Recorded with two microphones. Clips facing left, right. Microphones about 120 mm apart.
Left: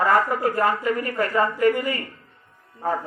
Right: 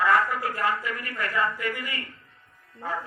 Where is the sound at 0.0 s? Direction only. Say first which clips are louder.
Left 3 dB; 40° left (ahead or behind).